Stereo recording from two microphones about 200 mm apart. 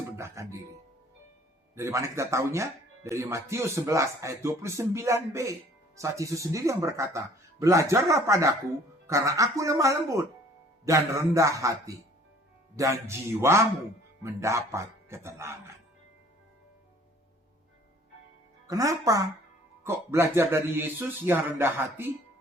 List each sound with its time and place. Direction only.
0.2 s music: 15° right (ahead or behind)
1.7 s speech: 15° right (ahead or behind)
18.7 s speech: 15° right (ahead or behind)